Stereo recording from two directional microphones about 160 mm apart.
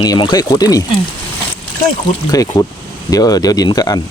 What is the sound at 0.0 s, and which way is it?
Speech, 25° left (ahead or behind).